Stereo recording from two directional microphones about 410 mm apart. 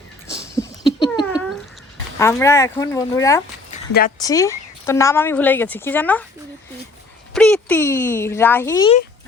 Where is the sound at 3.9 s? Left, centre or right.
Left.